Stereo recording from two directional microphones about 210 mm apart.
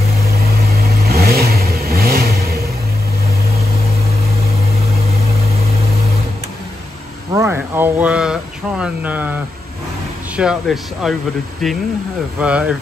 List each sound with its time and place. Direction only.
0.7 s vehicle: 45° right (ahead or behind)
7.3 s a sound: 10° right (ahead or behind)
10.3 s speech: 5° right (ahead or behind)